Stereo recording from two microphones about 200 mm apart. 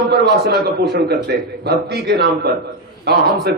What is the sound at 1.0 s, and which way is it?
A man's voice, 55° right (ahead or behind).